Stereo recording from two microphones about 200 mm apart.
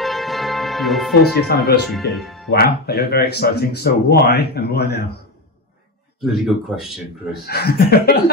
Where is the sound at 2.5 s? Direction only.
50° left (ahead or behind).